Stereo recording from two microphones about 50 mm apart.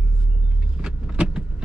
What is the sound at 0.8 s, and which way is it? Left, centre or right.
Vehicle, right.